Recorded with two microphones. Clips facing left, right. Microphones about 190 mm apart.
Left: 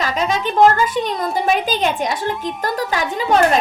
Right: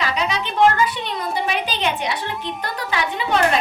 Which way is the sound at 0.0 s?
45° left (ahead or behind).